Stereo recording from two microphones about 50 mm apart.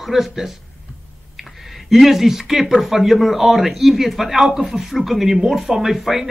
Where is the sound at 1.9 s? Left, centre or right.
Centre.